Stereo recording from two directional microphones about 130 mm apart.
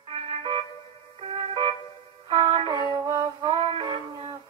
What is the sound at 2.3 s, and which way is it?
Music, 45° right (ahead or behind).